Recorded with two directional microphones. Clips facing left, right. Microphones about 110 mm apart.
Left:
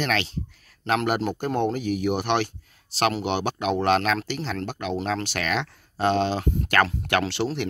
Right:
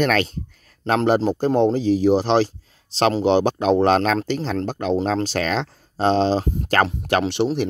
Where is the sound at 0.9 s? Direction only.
30° right (ahead or behind).